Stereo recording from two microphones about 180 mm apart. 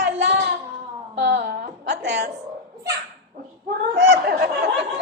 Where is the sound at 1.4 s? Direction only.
65° right (ahead or behind).